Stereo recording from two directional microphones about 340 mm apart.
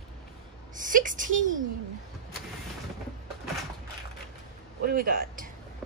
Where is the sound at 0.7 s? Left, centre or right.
Right.